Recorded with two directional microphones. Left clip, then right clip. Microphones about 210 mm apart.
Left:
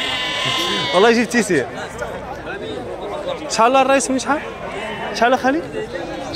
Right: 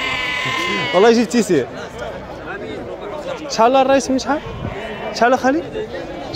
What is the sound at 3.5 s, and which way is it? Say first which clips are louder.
A man's voice: right 1 dB; 15° right (ahead or behind).